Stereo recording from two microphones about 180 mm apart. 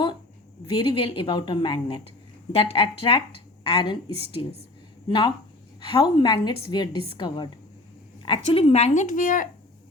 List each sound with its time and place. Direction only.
0.7 s a woman's voice: 25° left (ahead or behind)
8.5 s a woman's voice: 35° left (ahead or behind)